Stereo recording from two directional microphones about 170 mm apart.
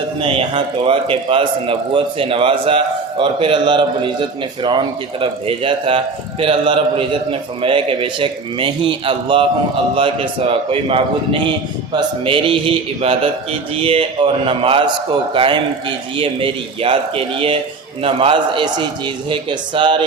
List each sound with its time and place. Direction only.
0.2 s a man's voice: 30° right (ahead or behind)